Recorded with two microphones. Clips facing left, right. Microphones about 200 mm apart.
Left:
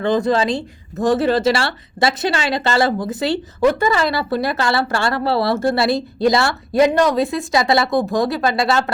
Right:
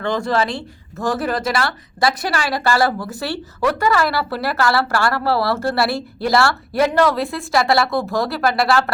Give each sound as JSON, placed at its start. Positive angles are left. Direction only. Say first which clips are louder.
{"t": 0.0, "sound": "speech", "louder": "left 3 dB", "side_deg": 20}